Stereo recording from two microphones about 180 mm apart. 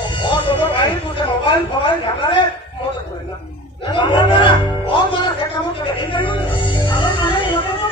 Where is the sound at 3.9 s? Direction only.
25° left (ahead or behind).